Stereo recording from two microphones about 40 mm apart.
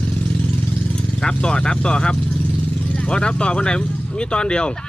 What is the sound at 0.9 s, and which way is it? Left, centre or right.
Speech, left.